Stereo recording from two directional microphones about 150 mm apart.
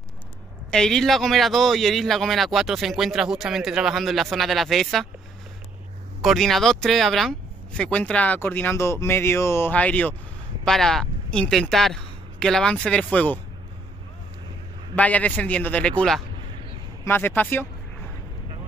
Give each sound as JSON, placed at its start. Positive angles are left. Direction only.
{"t": 0.7, "sound": "a man's voice", "side_deg": 5}
{"t": 6.2, "sound": "speech", "side_deg": 0}
{"t": 15.0, "sound": "speech", "side_deg": 10}